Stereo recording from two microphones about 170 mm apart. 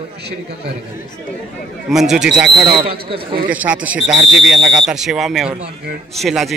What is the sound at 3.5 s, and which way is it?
Speech, 10° right (ahead or behind).